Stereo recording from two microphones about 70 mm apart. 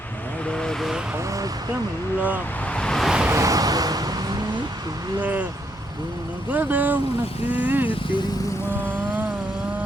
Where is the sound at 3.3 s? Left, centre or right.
Right.